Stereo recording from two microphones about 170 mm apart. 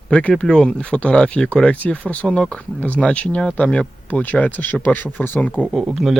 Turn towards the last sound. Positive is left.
turn(degrees=0)  # may be behind; listen again after turning